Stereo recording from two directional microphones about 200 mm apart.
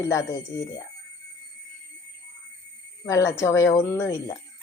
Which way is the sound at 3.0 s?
15° left (ahead or behind).